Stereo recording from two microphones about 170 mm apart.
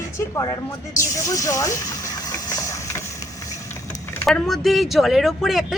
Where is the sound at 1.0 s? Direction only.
20° left (ahead or behind).